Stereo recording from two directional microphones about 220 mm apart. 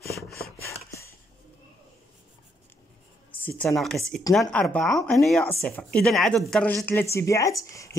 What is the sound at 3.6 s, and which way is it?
A woman's voice, centre (ahead or behind).